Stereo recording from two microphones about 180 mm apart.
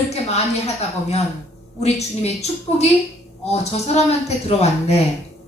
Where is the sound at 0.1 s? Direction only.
35° left (ahead or behind).